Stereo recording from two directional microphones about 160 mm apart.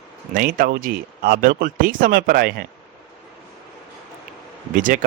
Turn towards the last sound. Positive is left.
turn(degrees=-55)  # may be behind; listen again after turning